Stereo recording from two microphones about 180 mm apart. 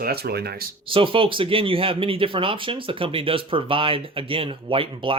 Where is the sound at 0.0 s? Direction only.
60° right (ahead or behind).